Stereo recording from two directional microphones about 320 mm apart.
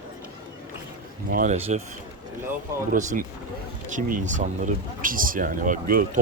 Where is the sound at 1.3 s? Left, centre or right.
Right.